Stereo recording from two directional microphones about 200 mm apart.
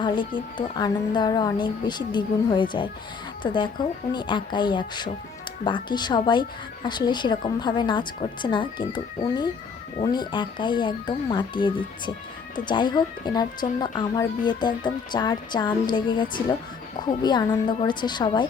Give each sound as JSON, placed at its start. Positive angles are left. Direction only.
{"t": 0.8, "sound": "speech", "side_deg": 20}